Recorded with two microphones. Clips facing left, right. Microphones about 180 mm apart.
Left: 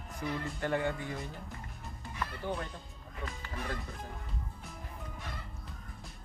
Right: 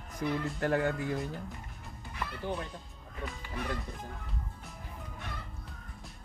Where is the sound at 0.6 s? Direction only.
40° right (ahead or behind).